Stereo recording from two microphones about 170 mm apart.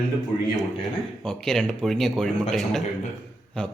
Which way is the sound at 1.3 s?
5° left (ahead or behind).